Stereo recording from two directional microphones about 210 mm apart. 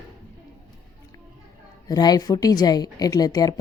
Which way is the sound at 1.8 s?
20° left (ahead or behind).